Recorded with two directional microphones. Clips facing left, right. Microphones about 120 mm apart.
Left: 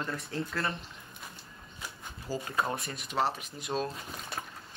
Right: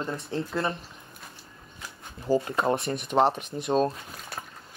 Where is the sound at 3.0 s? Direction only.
55° right (ahead or behind).